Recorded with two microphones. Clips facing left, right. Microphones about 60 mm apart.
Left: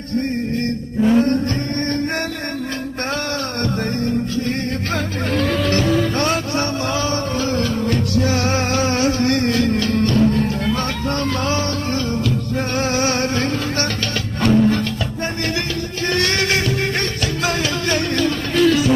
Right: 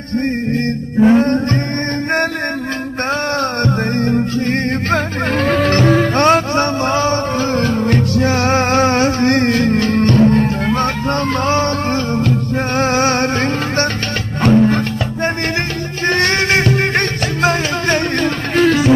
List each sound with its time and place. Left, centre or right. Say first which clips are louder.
1.0 s music: right 4 dB; right
3.6 s music: right 5 dB; right
16.0 s music: right 5 dB; right